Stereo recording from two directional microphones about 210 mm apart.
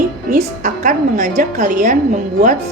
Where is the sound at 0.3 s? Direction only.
35° right (ahead or behind).